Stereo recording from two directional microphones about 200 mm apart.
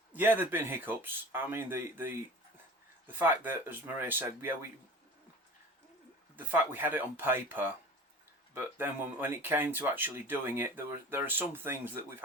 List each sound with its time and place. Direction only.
0.1 s speech: 10° right (ahead or behind)
6.3 s speech: 10° right (ahead or behind)